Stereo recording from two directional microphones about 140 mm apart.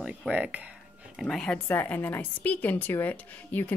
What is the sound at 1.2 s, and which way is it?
A woman's voice, 5° left (ahead or behind).